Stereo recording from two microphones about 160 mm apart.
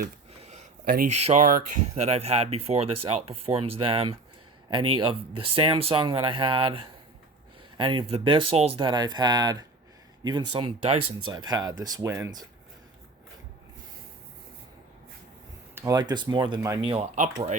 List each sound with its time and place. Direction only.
0.3 s a sound: 45° right (ahead or behind)
1.1 s speech: 45° right (ahead or behind); by 12.5 s 20° right (ahead or behind)
15.7 s a sound: 15° right (ahead or behind)
16.0 s speech: 25° right (ahead or behind)
16.6 s speech: 20° right (ahead or behind)
16.8 s speech: 40° right (ahead or behind)